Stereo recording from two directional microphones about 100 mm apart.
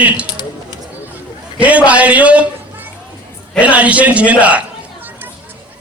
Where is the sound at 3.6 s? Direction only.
15° right (ahead or behind).